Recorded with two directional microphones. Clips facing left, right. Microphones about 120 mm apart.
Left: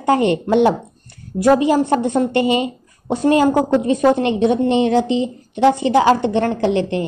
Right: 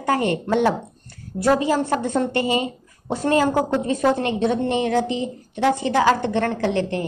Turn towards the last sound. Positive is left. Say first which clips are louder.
# left 4 dB
turn(degrees=20)  # may be behind; listen again after turning